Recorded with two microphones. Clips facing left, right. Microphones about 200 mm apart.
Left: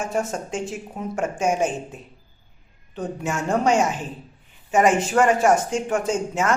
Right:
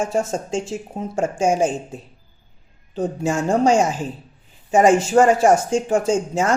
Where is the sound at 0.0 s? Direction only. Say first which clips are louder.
Right 4 dB; 30° right (ahead or behind).